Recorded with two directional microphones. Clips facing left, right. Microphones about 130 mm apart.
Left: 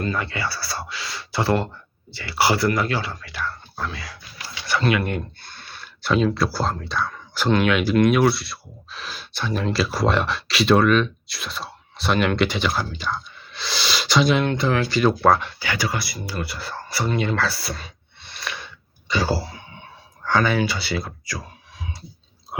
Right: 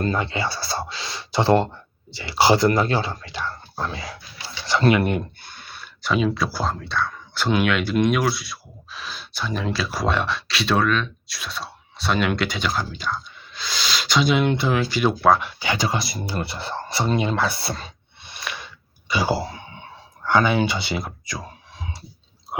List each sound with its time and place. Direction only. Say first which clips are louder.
0.0 s speech: right 2 dB; 25° right (ahead or behind)
5.7 s speech: left 2 dB; centre (ahead or behind); by 17.9 s 30° right (ahead or behind)
18.2 s a sound: even; 15° right (ahead or behind)
19.0 s speech: right 1 dB; 10° right (ahead or behind)